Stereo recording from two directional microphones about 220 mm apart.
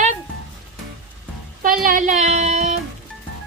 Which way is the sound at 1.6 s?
40° right (ahead or behind).